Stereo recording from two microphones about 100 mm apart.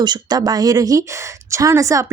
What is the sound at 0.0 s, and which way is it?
Speech, 45° right (ahead or behind).